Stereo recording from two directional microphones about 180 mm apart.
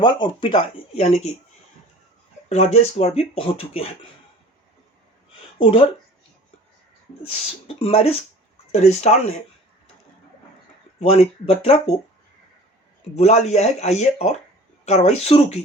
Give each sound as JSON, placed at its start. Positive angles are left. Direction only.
{"t": 0.0, "sound": "speech", "side_deg": 25}
{"t": 2.5, "sound": "speech", "side_deg": 40}
{"t": 5.5, "sound": "speech", "side_deg": 30}
{"t": 7.7, "sound": "speech", "side_deg": 30}
{"t": 11.1, "sound": "speech", "side_deg": 35}
{"t": 13.1, "sound": "speech", "side_deg": 35}